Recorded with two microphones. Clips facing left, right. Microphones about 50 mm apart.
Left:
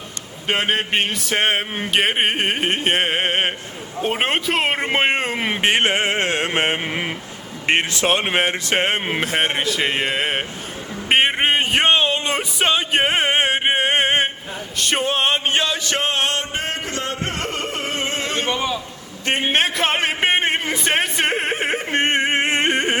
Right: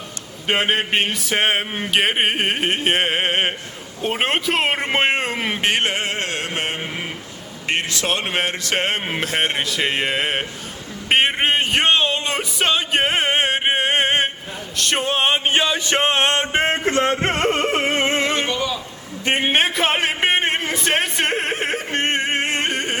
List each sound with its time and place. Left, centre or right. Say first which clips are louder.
0.4 s a man's voice: right 1 dB; centre
15.8 s music: right 3 dB; right
18.4 s a man's voice: left 1 dB; left
19.2 s speech: right 1 dB; centre
21.8 s a sound: left 4 dB; centre